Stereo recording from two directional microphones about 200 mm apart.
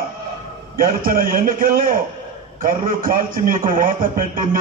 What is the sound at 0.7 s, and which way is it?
A man's voice, 45° right (ahead or behind).